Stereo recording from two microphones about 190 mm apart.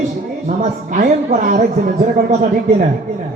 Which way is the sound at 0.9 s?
40° right (ahead or behind).